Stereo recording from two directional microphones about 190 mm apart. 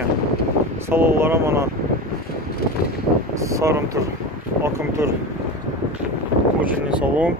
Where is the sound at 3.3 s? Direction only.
15° right (ahead or behind).